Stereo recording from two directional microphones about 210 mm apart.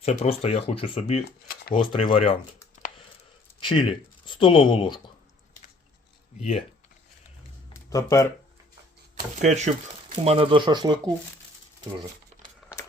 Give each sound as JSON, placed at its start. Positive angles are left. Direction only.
{"t": 0.0, "sound": "speech", "side_deg": 30}
{"t": 3.6, "sound": "speech", "side_deg": 25}
{"t": 7.7, "sound": "a sound", "side_deg": 15}
{"t": 9.4, "sound": "speech", "side_deg": -30}
{"t": 12.6, "sound": "crumpling", "side_deg": 0}